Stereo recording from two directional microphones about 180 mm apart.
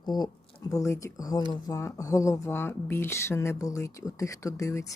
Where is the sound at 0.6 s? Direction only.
20° left (ahead or behind).